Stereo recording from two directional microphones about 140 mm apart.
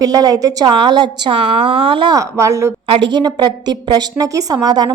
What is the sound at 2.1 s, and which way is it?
Speech, 20° right (ahead or behind).